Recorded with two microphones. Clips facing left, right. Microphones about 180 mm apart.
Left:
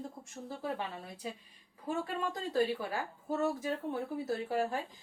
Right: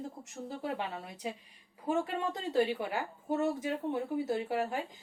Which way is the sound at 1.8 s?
20° right (ahead or behind).